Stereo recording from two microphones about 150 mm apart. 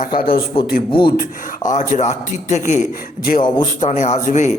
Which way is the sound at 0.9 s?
30° left (ahead or behind).